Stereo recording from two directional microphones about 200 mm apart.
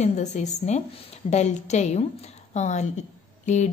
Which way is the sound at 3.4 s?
35° left (ahead or behind).